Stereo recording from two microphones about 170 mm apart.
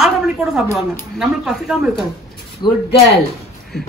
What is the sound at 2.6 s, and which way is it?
Speech, 25° left (ahead or behind).